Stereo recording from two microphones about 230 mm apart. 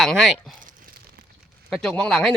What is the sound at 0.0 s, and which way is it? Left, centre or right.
Speech, centre.